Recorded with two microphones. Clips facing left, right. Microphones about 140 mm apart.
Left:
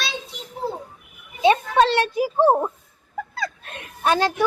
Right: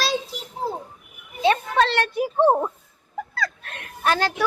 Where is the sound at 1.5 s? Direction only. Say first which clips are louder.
Left 3 dB; 15° left (ahead or behind).